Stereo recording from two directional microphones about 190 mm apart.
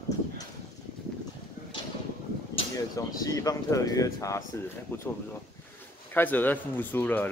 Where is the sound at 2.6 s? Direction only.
20° left (ahead or behind).